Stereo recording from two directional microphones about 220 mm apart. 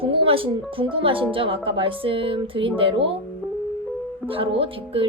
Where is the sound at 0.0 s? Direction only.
25° right (ahead or behind).